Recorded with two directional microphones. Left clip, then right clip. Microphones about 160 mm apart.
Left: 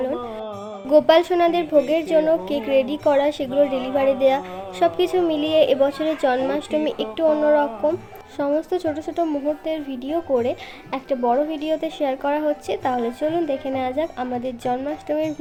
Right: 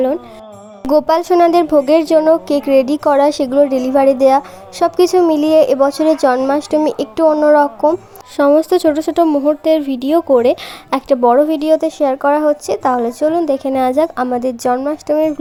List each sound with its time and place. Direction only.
0.9 s a woman's voice: 45° right (ahead or behind)
8.4 s a woman's voice: 50° right (ahead or behind); by 15.3 s 35° right (ahead or behind)